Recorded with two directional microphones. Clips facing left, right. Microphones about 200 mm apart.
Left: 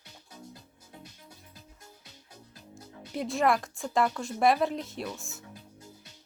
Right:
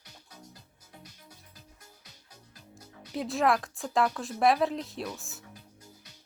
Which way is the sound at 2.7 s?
Centre (ahead or behind).